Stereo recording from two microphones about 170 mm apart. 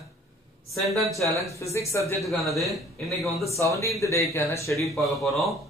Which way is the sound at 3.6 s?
20° left (ahead or behind).